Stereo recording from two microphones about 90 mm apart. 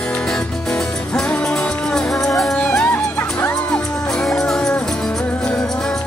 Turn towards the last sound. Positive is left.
turn(degrees=5)  # may be behind; listen again after turning